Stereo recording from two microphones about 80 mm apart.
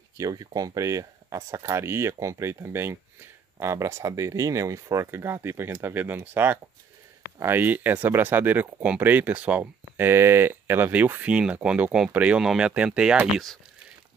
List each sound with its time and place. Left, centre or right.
0.2 s speech: right; by 13.3 s centre